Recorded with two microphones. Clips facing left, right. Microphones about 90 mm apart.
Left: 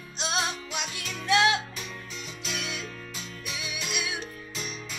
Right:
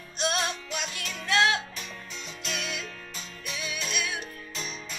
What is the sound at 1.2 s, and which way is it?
Music, 15° left (ahead or behind).